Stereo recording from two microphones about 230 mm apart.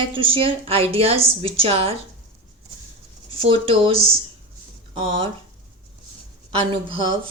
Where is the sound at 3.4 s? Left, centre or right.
Right.